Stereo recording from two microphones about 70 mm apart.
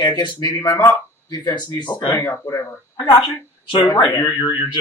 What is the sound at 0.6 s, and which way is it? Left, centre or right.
Speech, left.